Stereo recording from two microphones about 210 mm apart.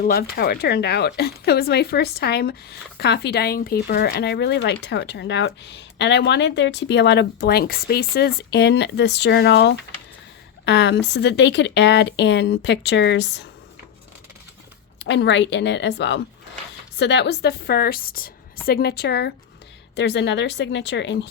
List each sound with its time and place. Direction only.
0.0 s speech: 45° left (ahead or behind)
15.0 s speech: 60° left (ahead or behind)